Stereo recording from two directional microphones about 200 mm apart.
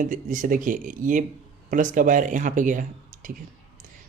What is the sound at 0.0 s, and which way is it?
Speech, 40° right (ahead or behind).